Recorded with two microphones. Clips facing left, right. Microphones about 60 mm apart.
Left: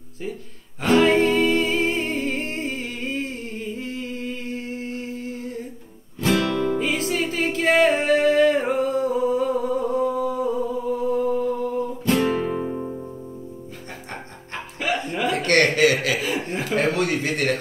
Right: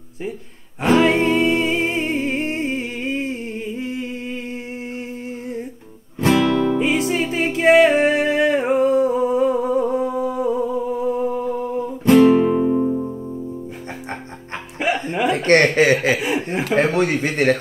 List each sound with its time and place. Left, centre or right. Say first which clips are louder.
0.8 s music: right 2 dB; centre
4.9 s humming: right 1 dB; right
6.2 s music: right 5 dB; centre
6.8 s music: right 4 dB; centre
7.8 s humming: right 3 dB; right
12.3 s music: right 9 dB; centre
14.8 s chuckle: right 4 dB; right
16.2 s chuckle: right 4 dB; centre
16.9 s speech: right 4 dB; right